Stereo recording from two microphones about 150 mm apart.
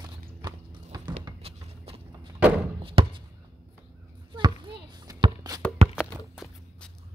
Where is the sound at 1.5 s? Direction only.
40° right (ahead or behind).